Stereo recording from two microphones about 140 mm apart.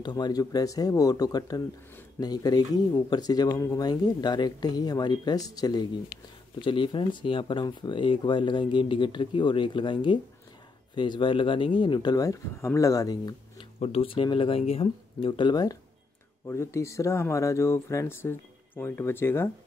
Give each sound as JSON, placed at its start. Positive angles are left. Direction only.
{"t": 0.0, "sound": "speech", "side_deg": 30}
{"t": 13.7, "sound": "speech", "side_deg": 45}